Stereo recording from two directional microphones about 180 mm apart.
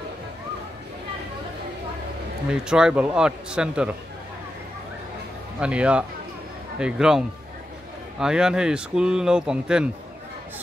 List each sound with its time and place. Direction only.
2.6 s speech: 5° right (ahead or behind)
5.6 s speech: 5° right (ahead or behind)